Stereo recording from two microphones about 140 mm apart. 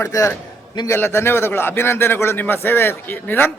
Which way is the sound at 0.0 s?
20° left (ahead or behind).